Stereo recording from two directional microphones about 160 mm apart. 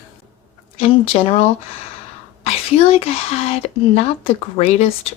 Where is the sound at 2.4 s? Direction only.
40° left (ahead or behind).